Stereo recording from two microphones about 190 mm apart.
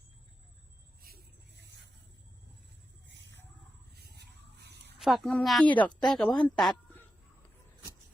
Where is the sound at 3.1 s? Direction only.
70° right (ahead or behind).